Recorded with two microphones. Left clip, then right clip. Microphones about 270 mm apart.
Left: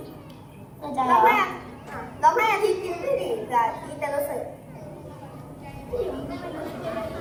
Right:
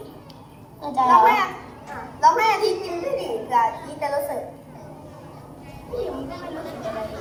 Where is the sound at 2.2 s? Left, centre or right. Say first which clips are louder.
Right 3 dB; right.